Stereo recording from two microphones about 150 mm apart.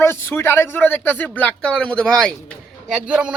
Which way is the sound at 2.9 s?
5° right (ahead or behind).